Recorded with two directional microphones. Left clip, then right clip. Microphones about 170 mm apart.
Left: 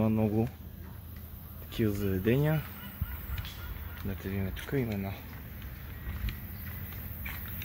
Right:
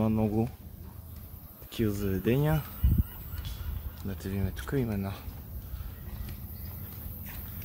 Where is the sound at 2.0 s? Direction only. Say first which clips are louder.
Right 1 dB; 15° right (ahead or behind).